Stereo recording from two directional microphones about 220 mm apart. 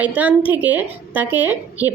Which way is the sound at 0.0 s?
5° right (ahead or behind).